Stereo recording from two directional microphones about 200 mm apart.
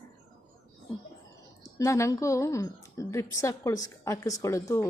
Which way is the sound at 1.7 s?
15° left (ahead or behind).